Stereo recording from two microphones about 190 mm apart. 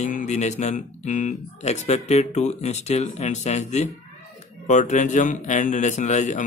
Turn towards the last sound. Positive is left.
turn(degrees=40)  # may be behind; listen again after turning